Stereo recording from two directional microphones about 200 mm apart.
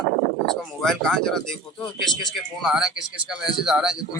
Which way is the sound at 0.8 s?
5° left (ahead or behind).